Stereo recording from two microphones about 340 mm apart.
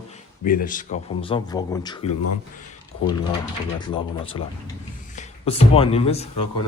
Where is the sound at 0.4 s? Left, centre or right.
Left.